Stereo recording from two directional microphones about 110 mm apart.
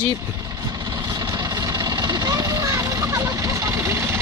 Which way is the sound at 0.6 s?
35° right (ahead or behind).